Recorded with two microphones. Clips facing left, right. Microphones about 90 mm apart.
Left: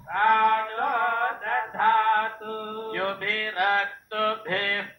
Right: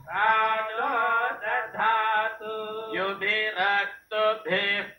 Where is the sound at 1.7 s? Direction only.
25° left (ahead or behind).